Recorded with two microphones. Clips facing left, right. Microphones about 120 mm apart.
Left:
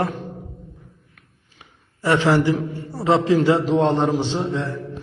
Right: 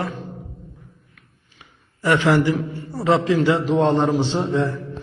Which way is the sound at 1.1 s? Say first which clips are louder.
Even; 35° left (ahead or behind).